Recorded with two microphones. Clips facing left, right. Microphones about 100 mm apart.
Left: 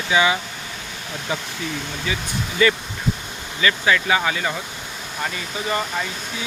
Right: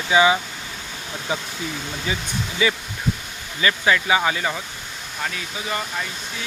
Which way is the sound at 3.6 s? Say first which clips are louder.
Even; 25° right (ahead or behind).